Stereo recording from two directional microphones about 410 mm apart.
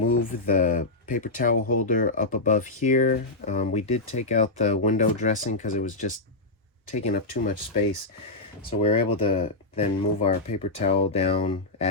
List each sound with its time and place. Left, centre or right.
0.3 s speech: centre
8.8 s speech: centre